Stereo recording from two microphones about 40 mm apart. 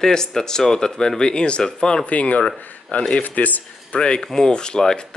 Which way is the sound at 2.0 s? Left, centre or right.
Left.